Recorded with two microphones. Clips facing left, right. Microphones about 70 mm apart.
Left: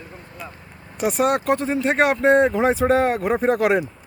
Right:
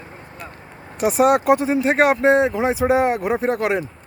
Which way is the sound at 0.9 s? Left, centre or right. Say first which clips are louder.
Right 4 dB; centre.